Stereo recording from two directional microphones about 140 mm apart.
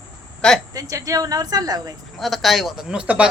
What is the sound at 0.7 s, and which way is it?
Speech, 25° right (ahead or behind).